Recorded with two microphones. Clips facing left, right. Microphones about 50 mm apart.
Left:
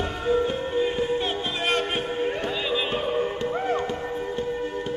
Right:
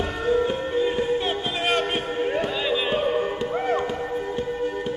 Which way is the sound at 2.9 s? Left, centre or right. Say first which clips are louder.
Right 3 dB; centre.